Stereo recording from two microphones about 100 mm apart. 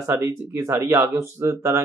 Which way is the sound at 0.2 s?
25° right (ahead or behind).